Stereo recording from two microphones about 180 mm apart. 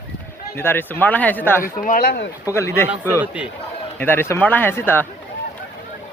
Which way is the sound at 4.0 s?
10° left (ahead or behind).